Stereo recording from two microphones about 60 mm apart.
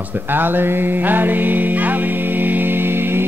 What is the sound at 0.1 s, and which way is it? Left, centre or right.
Music, right.